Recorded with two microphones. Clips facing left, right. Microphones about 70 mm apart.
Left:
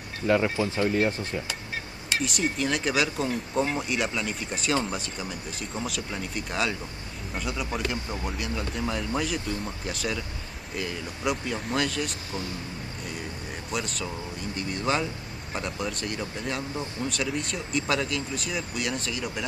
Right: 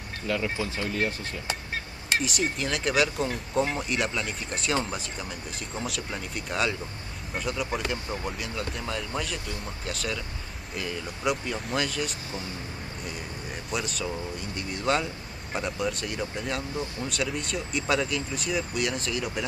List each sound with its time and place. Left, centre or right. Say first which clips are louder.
0.3 s speech: left 5 dB; left
2.2 s speech: left 2 dB; centre